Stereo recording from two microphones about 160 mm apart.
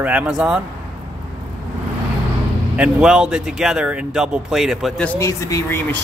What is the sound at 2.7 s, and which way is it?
Speech, 5° right (ahead or behind).